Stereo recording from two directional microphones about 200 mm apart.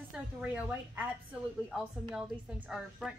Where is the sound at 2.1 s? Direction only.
5° right (ahead or behind).